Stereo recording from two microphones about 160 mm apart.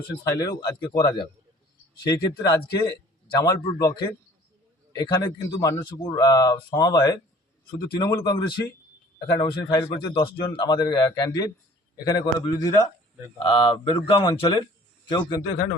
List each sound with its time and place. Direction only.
0.3 s a man's voice: 25° left (ahead or behind)